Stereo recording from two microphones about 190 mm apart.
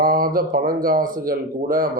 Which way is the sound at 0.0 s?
45° right (ahead or behind).